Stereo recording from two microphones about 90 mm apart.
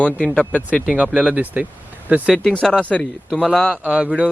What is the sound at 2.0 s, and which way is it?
Speech, 15° right (ahead or behind).